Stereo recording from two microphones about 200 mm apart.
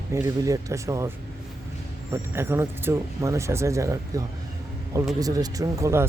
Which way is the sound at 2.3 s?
10° right (ahead or behind).